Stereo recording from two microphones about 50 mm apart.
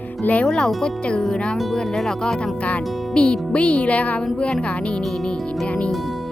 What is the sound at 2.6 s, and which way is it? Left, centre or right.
Speech, left.